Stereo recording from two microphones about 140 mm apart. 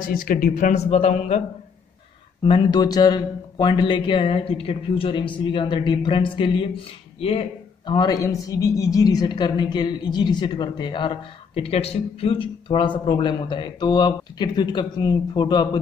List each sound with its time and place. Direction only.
0.1 s a man's voice: 90° left
0.7 s speech: 50° left (ahead or behind)
2.4 s a woman's voice: 35° left (ahead or behind)
7.2 s a sound: 45° left (ahead or behind)
7.9 s a woman's voice: 30° left (ahead or behind)